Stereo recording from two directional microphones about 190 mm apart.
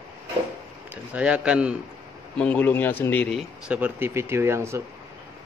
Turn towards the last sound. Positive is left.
turn(degrees=-15)  # may be behind; listen again after turning